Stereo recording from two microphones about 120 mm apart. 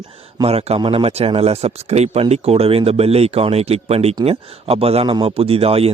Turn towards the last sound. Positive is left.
turn(degrees=-55)  # may be behind; listen again after turning